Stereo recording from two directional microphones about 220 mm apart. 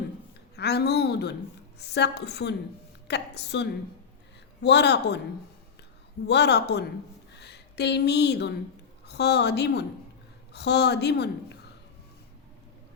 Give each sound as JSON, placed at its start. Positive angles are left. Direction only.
{"t": 0.5, "sound": "a woman's voice", "side_deg": 50}
{"t": 6.2, "sound": "a woman's voice", "side_deg": 50}